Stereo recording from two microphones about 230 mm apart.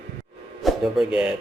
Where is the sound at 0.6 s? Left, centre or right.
Centre.